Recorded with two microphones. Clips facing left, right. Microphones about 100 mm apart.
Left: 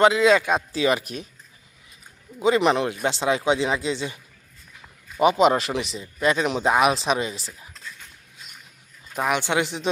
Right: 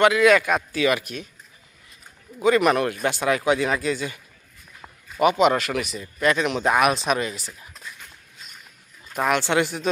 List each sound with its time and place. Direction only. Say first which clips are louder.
0.0 s speech: even; 25° left (ahead or behind)
2.4 s speech: right 1 dB; 25° left (ahead or behind)
5.2 s speech: left 1 dB; 30° left (ahead or behind)
9.2 s speech: right 2 dB; 15° left (ahead or behind)